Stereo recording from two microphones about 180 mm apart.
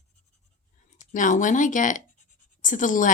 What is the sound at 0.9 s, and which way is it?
A woman's voice, 45° left (ahead or behind).